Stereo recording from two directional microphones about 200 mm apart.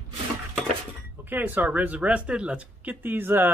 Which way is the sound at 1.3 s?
10° right (ahead or behind).